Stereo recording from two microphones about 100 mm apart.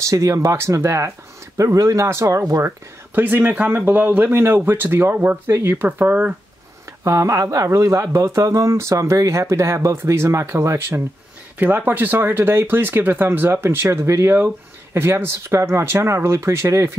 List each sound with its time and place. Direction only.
0.0 s speech: 35° right (ahead or behind)
3.2 s speech: 20° right (ahead or behind)
7.1 s speech: 30° right (ahead or behind)
11.5 s speech: 20° right (ahead or behind)